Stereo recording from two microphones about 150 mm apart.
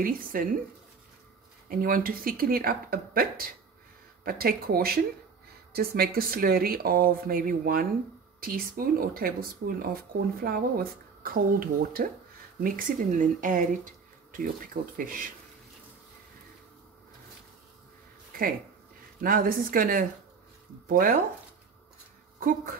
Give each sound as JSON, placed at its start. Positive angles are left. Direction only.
{"t": 0.0, "sound": "speech", "side_deg": -70}
{"t": 1.7, "sound": "speech", "side_deg": -70}
{"t": 19.2, "sound": "speech", "side_deg": -70}
{"t": 22.4, "sound": "speech", "side_deg": -65}